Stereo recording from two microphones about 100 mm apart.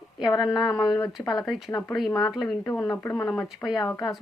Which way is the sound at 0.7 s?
35° left (ahead or behind).